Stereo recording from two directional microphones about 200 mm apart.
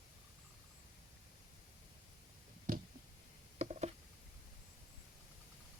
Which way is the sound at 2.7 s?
40° right (ahead or behind).